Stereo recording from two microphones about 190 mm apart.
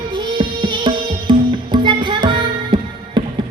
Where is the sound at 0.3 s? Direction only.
25° right (ahead or behind).